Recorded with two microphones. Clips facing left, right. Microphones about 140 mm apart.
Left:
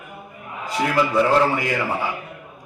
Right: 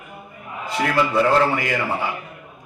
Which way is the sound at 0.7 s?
10° left (ahead or behind).